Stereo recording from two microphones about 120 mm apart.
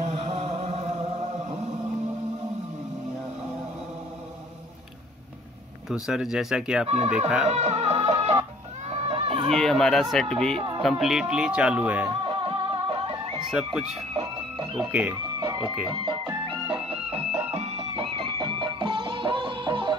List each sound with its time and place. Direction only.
0.0 s chant: 65° right (ahead or behind)
5.9 s speech: 5° right (ahead or behind)
7.4 s chicken: 70° right (ahead or behind)
9.5 s speech: 5° left (ahead or behind)
12.1 s music: 45° right (ahead or behind)
14.9 s speech: 15° right (ahead or behind)
15.4 s music: 40° right (ahead or behind)